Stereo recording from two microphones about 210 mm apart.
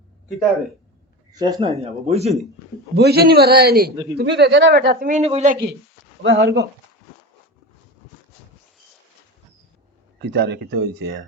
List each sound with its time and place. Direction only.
1.3 s speech: 20° right (ahead or behind)
2.9 s speech: 50° right (ahead or behind); by 5.5 s 30° right (ahead or behind)
6.2 s speech: 55° right (ahead or behind)
10.2 s speech: 55° right (ahead or behind)